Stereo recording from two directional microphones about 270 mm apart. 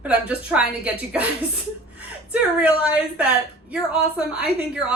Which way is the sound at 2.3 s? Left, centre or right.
Centre.